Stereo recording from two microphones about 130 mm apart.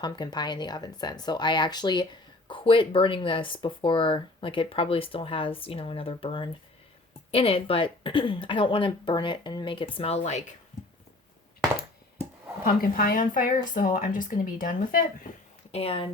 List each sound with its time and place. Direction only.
0.0 s speech: 35° left (ahead or behind); by 10.5 s 60° left (ahead or behind)
12.6 s speech: 90° left
15.7 s speech: 50° left (ahead or behind)